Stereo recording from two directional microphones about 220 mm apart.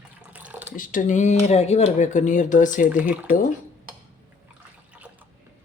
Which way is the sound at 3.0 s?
5° right (ahead or behind).